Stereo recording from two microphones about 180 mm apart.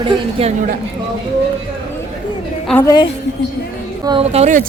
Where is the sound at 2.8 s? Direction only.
20° left (ahead or behind).